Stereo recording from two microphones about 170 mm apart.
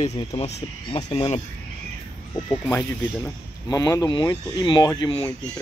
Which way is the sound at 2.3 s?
15° left (ahead or behind).